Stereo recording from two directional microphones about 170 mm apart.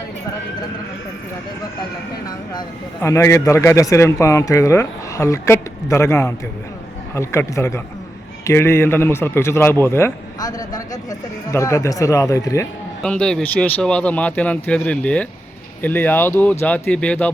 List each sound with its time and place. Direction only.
2.6 s a man's voice: 15° left (ahead or behind)
13.0 s a man's voice: 5° left (ahead or behind)